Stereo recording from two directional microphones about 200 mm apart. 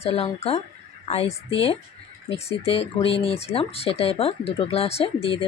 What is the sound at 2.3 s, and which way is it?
Speech, 30° left (ahead or behind).